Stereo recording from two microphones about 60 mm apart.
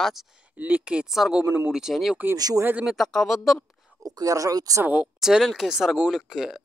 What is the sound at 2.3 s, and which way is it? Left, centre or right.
Speech, right.